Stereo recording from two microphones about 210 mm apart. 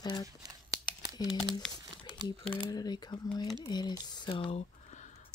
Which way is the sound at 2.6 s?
20° left (ahead or behind).